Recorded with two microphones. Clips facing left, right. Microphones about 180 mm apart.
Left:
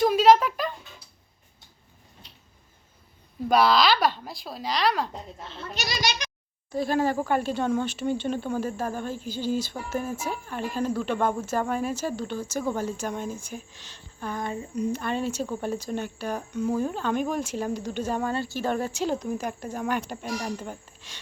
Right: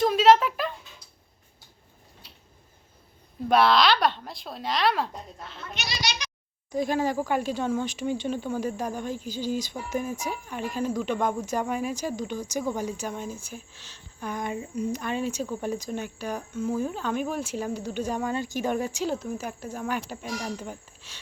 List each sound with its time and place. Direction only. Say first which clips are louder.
0.0 s a sound: left 1 dB; centre (ahead or behind)
3.5 s speech: even; centre (ahead or behind)
5.4 s speech: left 2 dB; 30° left (ahead or behind)
5.7 s speech: left 4 dB; 45° left (ahead or behind)
6.7 s speech: left 1 dB; 15° right (ahead or behind)
14.2 s speech: even; 15° right (ahead or behind)